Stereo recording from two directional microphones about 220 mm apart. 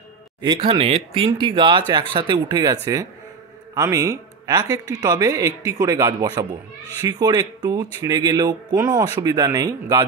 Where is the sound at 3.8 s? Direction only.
15° right (ahead or behind).